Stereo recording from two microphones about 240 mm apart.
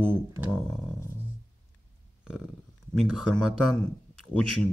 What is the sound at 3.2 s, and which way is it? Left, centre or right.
Speech, centre.